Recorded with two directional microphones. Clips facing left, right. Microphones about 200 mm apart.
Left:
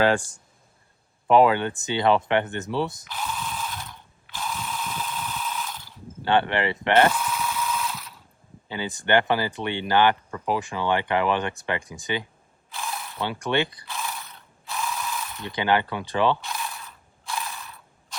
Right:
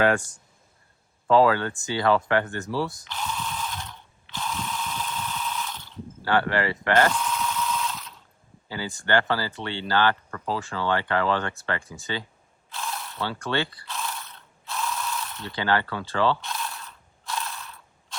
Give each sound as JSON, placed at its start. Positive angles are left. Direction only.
{"t": 0.0, "sound": "speech", "side_deg": 30}
{"t": 1.3, "sound": "speech", "side_deg": 20}
{"t": 3.1, "sound": "ratchet", "side_deg": 5}
{"t": 4.4, "sound": "mechanisms", "side_deg": 5}
{"t": 6.2, "sound": "speech", "side_deg": 25}
{"t": 7.1, "sound": "mechanisms", "side_deg": 5}
{"t": 8.7, "sound": "speech", "side_deg": 20}
{"t": 12.8, "sound": "mechanisms", "side_deg": 0}
{"t": 13.2, "sound": "ratchet", "side_deg": 20}
{"t": 15.4, "sound": "speech", "side_deg": 15}
{"t": 16.5, "sound": "mechanisms", "side_deg": 5}